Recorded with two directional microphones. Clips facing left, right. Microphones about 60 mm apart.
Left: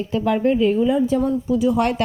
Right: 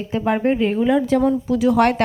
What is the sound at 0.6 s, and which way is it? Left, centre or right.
Speech, right.